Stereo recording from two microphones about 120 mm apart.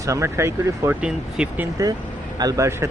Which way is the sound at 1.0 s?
10° right (ahead or behind).